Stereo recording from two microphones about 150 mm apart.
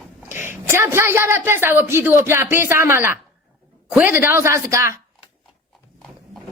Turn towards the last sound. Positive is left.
turn(degrees=-20)  # may be behind; listen again after turning